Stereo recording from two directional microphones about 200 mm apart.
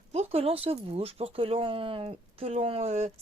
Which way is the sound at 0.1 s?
30° right (ahead or behind).